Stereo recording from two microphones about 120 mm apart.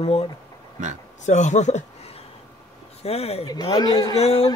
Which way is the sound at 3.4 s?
35° left (ahead or behind).